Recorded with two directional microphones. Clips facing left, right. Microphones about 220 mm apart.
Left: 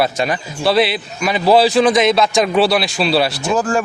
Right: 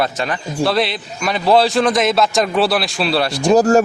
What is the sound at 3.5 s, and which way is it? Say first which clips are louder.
Speech: right 11 dB; 40° right (ahead or behind).